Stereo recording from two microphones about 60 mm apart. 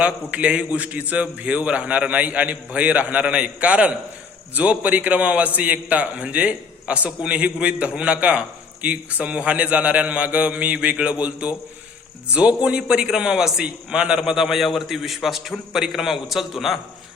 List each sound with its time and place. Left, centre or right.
0.0 s a man's voice: right; by 16.7 s centre